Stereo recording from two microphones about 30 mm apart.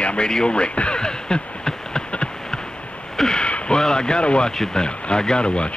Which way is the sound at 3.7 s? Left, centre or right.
Left.